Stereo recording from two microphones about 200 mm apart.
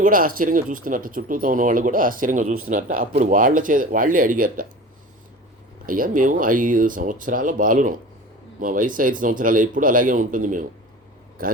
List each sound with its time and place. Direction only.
0.0 s speech: 45° right (ahead or behind)
5.8 s speech: 45° right (ahead or behind)